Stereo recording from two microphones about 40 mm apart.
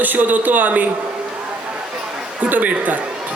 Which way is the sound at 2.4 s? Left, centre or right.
Right.